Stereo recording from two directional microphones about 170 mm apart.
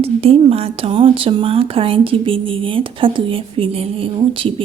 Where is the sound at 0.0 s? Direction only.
35° right (ahead or behind).